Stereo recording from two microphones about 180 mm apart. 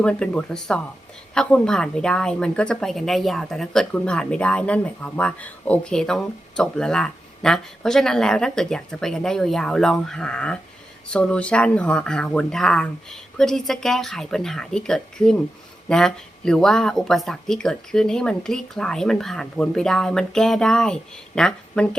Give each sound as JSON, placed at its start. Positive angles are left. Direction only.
{"t": 0.0, "sound": "a woman's voice", "side_deg": 5}